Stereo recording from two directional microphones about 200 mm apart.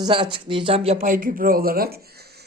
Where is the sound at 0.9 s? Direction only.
45° right (ahead or behind).